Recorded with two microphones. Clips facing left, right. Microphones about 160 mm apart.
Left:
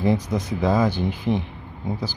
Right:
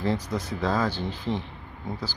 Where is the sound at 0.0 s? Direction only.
15° left (ahead or behind).